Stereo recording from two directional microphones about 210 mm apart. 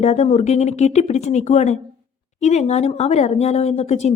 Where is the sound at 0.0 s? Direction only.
30° left (ahead or behind).